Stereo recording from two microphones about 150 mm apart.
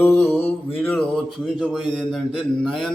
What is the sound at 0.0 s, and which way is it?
Mantra, 15° left (ahead or behind).